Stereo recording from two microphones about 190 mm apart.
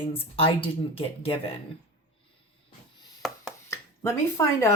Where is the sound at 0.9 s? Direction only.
30° left (ahead or behind).